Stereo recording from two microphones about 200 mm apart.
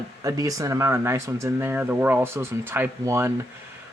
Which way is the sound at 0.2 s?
15° right (ahead or behind).